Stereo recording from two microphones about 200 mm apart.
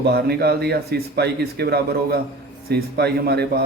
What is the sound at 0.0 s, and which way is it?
A man's voice, 55° right (ahead or behind).